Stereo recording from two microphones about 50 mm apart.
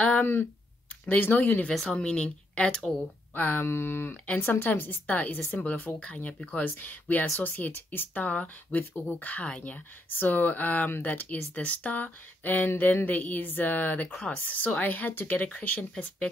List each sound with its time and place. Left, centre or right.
0.2 s speech: left
1.7 s speech: centre
3.3 s speech: left
3.6 s speech: left
14.1 s speech: centre
14.4 s speech: left